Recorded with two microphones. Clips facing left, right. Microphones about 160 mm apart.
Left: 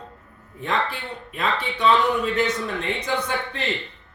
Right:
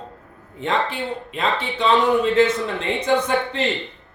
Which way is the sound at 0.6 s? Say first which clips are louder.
Right 3 dB; 20° right (ahead or behind).